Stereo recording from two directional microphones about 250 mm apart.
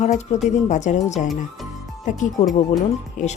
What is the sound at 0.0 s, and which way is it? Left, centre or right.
Speech, left.